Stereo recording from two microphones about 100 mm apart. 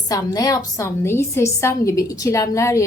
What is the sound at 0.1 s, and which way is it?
A woman's voice, 35° left (ahead or behind).